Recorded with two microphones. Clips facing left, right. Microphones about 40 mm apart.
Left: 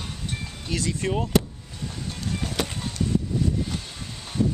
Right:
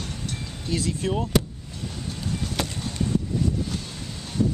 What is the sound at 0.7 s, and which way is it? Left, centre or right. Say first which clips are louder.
Speech: right 1 dB; left.